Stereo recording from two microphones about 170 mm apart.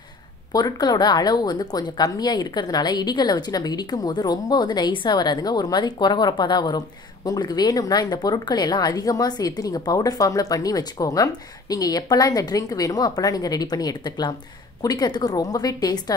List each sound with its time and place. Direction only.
0.5 s speech: 20° left (ahead or behind)